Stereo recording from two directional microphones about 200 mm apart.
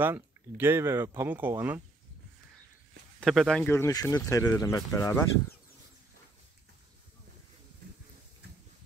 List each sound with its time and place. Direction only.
0.0 s speech: 10° right (ahead or behind)
3.2 s speech: centre (ahead or behind)
3.7 s speech: 15° left (ahead or behind)